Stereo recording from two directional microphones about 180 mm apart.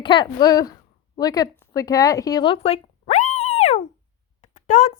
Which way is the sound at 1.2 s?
20° left (ahead or behind).